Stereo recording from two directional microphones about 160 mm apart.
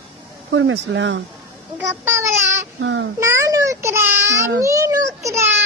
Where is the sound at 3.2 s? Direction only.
20° right (ahead or behind).